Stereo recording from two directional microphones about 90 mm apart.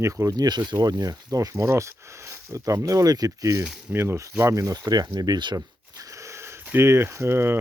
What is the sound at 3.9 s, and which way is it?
Speech, 25° right (ahead or behind).